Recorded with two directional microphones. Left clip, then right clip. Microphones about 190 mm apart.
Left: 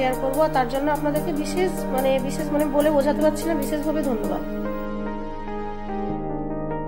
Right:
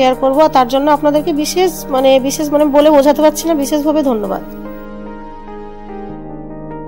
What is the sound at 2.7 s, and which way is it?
Speech, 40° right (ahead or behind).